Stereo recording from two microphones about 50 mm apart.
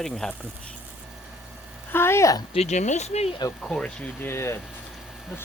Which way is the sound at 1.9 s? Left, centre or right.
Left.